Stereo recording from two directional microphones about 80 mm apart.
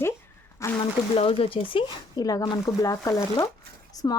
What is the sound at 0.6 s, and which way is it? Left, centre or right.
Speech, left.